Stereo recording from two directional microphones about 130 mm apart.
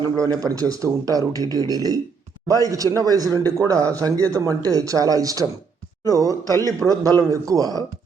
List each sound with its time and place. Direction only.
0.0 s a man's voice: 30° right (ahead or behind)
6.4 s a man's voice: 25° left (ahead or behind)
6.8 s a man's voice: 30° right (ahead or behind)